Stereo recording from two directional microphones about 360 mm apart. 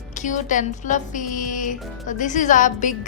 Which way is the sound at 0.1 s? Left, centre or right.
Centre.